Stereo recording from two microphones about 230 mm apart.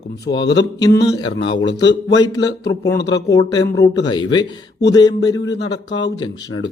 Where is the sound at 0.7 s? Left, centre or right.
Centre.